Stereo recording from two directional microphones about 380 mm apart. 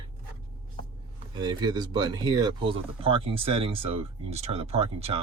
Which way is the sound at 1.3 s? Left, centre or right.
Centre.